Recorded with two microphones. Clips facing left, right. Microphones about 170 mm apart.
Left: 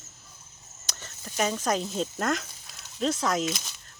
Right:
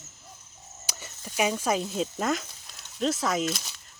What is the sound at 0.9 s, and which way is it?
Speech, 10° right (ahead or behind).